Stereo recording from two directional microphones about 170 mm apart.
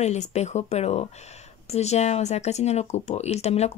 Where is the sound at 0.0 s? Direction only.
40° left (ahead or behind).